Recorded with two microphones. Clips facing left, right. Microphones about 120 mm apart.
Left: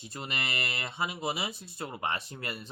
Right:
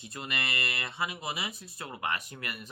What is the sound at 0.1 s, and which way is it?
Speech, 30° left (ahead or behind).